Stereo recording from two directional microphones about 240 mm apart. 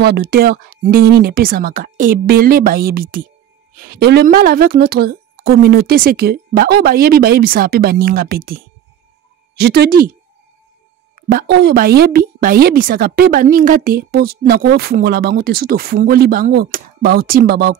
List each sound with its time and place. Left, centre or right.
0.0 s a woman's voice: right
11.1 s a woman's voice: right